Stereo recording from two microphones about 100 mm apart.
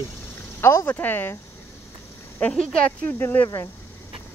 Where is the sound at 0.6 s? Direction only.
25° left (ahead or behind).